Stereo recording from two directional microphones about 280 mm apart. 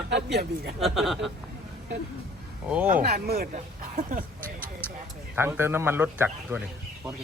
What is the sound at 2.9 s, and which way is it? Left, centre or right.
Speech, right.